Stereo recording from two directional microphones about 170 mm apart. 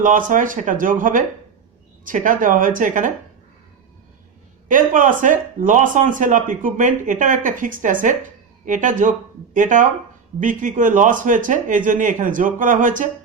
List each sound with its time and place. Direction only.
0.0 s speech: 50° right (ahead or behind)
4.7 s speech: 50° right (ahead or behind)